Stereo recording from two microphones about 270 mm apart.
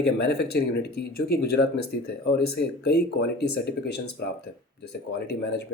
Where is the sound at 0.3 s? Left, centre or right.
Left.